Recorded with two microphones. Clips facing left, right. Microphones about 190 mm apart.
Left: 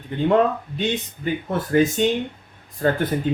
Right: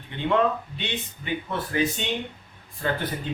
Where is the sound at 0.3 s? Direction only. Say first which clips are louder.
Left 4 dB; 40° left (ahead or behind).